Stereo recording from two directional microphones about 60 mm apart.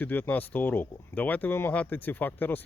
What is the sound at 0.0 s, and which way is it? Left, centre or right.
Speech, left.